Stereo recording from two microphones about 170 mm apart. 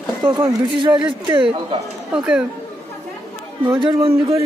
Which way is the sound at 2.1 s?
5° right (ahead or behind).